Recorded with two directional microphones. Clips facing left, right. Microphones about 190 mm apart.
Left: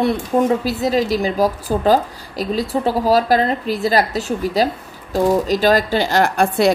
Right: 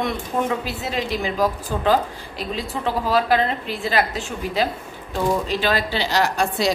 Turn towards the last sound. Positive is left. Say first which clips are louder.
# left 6 dB
turn(degrees=55)  # may be behind; listen again after turning